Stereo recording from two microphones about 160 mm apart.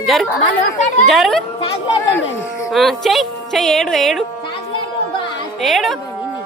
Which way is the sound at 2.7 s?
Centre (ahead or behind).